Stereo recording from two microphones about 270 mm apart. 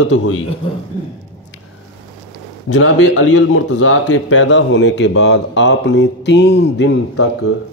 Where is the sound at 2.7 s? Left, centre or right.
Left.